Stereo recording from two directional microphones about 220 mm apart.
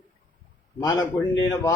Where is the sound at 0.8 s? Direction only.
15° left (ahead or behind).